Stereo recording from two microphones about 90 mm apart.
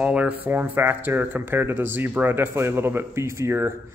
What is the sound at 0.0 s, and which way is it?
Speech, 15° right (ahead or behind).